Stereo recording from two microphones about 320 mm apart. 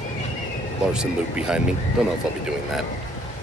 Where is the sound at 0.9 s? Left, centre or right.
Centre.